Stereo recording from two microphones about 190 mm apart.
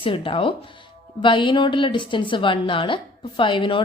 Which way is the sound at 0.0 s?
30° left (ahead or behind).